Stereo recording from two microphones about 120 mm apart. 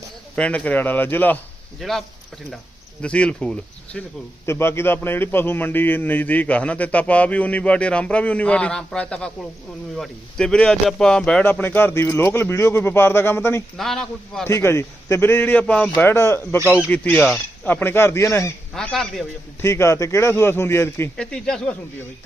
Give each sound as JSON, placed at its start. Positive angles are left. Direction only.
{"t": 0.3, "sound": "a man's voice", "side_deg": 10}
{"t": 1.8, "sound": "a man's voice", "side_deg": 0}
{"t": 4.4, "sound": "a man's voice", "side_deg": 20}
{"t": 11.4, "sound": "speech", "side_deg": 15}
{"t": 13.7, "sound": "speech", "side_deg": 0}
{"t": 14.4, "sound": "a man's voice", "side_deg": 20}
{"t": 18.7, "sound": "speech", "side_deg": 5}
{"t": 19.6, "sound": "speech", "side_deg": 25}
{"t": 21.2, "sound": "a man's voice", "side_deg": 10}